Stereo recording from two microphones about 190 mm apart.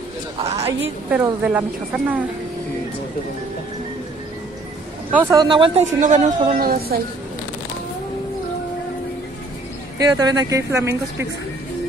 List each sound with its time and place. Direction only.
0.4 s a sound: 35° right (ahead or behind)
1.1 s speech: 5° right (ahead or behind)
5.1 s speech: 15° right (ahead or behind)
5.9 s speech: 40° right (ahead or behind)
9.9 s speech: 20° right (ahead or behind)